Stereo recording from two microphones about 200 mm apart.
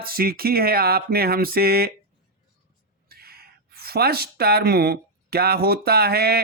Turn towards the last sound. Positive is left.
turn(degrees=-50)  # may be behind; listen again after turning